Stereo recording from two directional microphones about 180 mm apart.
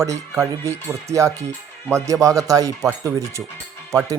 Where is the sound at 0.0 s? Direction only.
15° right (ahead or behind).